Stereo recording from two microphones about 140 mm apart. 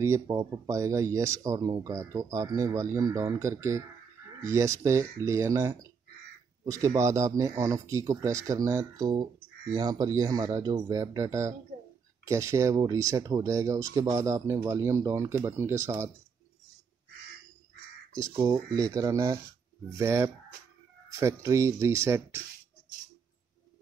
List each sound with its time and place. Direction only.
0.0 s speech: 20° right (ahead or behind)
18.1 s speech: 25° right (ahead or behind)